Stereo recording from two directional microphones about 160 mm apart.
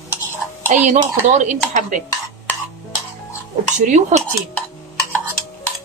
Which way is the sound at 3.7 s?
50° right (ahead or behind).